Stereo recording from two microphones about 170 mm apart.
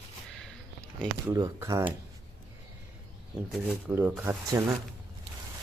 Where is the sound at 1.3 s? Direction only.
20° right (ahead or behind).